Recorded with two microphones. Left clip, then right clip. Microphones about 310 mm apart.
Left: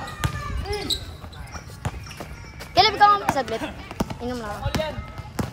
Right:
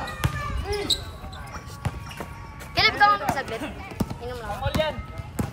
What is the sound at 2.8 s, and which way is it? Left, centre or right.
Basketball bounce, centre.